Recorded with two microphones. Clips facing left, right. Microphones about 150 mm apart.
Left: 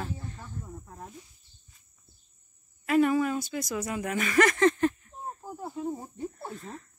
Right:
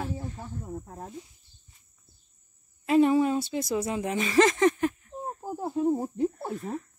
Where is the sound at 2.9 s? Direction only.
25° right (ahead or behind); by 5.1 s 5° right (ahead or behind).